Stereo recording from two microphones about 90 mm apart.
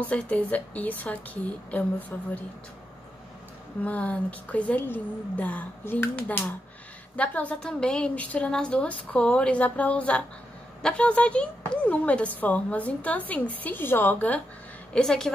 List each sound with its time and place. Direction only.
0.0 s speech: 15° left (ahead or behind)
3.8 s speech: 15° left (ahead or behind)
15.0 s speech: 5° left (ahead or behind)